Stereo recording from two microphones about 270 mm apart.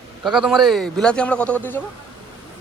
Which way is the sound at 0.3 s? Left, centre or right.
Centre.